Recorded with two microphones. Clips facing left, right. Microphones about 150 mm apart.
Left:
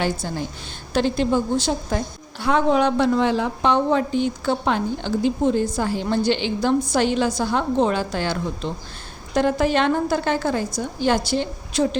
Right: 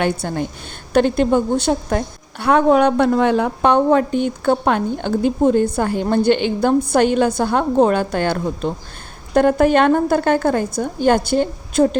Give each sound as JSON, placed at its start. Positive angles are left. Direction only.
{"t": 0.0, "sound": "a woman's voice", "side_deg": -55}